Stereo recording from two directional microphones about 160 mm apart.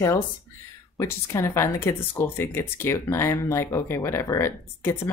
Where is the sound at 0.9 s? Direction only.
15° left (ahead or behind).